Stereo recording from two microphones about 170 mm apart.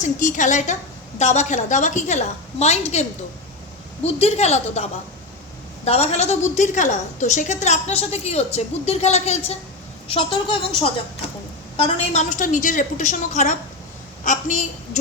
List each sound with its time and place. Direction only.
0.0 s a woman's voice: 50° left (ahead or behind); by 10.3 s 30° left (ahead or behind)
11.8 s a woman's voice: 40° left (ahead or behind)